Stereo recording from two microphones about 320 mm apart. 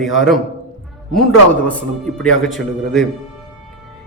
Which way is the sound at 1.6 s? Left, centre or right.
Centre.